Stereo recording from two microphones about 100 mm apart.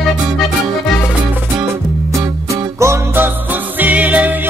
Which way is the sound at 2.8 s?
20° right (ahead or behind).